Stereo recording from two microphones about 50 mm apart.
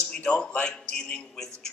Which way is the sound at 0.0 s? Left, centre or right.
Left.